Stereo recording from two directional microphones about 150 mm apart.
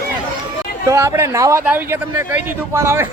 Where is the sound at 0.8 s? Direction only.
20° right (ahead or behind).